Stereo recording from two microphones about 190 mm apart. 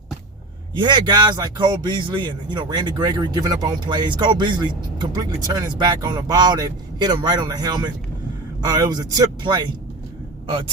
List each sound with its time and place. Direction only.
0.8 s speech: 25° right (ahead or behind)